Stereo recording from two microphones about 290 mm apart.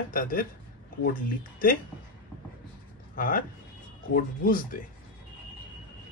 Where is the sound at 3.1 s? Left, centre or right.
Left.